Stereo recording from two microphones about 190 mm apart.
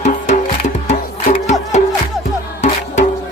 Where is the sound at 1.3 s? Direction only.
35° left (ahead or behind).